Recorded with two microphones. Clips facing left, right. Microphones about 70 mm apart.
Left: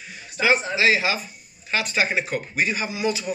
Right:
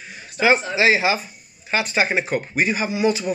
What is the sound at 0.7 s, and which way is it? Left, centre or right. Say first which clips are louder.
Speech: right 3 dB; centre.